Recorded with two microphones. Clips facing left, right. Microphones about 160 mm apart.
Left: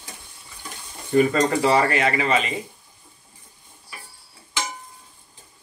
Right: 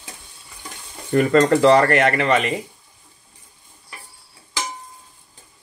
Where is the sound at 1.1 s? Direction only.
60° right (ahead or behind).